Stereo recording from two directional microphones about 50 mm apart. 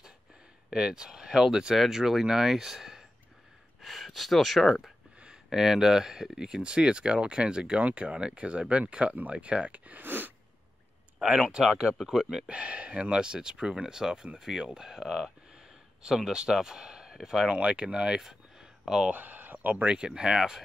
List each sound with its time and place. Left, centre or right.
0.7 s speech: centre
3.8 s speech: centre
5.2 s speech: centre; by 10.3 s right
11.1 s speech: centre
12.5 s speech: right
17.5 s speech: right
18.2 s a sound: centre
19.1 s speech: right
20.0 s speech: centre